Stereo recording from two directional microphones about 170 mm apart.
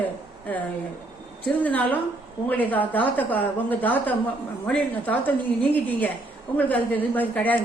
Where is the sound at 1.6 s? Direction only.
10° left (ahead or behind).